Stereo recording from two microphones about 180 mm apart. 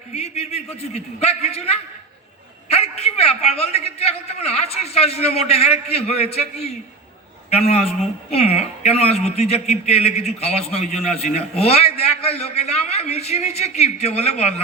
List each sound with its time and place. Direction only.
0.1 s a man's voice: 35° left (ahead or behind)